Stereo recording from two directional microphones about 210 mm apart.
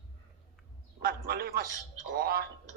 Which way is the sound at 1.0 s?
45° right (ahead or behind).